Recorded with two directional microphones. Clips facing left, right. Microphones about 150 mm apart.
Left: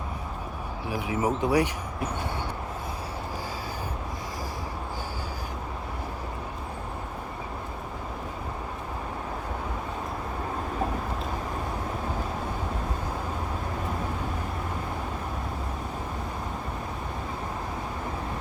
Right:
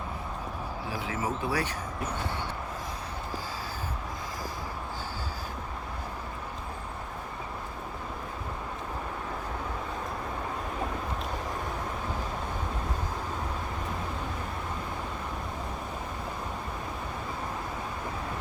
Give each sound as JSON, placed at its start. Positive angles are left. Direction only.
{"t": 0.9, "sound": "speech", "side_deg": 15}